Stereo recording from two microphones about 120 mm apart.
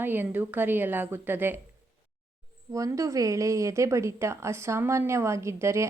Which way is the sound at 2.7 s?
25° right (ahead or behind).